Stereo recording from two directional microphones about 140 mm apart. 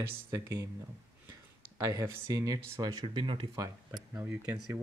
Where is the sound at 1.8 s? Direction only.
20° right (ahead or behind); by 3.5 s 35° right (ahead or behind).